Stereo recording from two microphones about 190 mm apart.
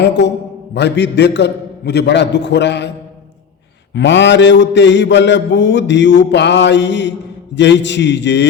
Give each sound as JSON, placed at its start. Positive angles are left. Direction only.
{"t": 0.7, "sound": "a man's voice", "side_deg": 65}
{"t": 3.9, "sound": "mantra", "side_deg": 70}